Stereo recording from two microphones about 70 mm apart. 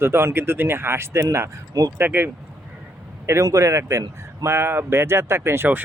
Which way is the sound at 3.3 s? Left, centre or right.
Right.